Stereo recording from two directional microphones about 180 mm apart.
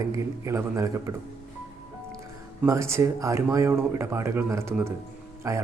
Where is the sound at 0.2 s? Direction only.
15° right (ahead or behind).